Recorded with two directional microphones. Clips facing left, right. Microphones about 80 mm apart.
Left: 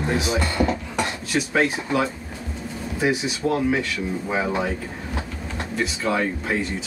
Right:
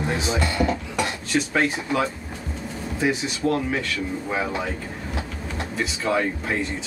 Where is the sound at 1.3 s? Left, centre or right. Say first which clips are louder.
Left 1 dB; centre.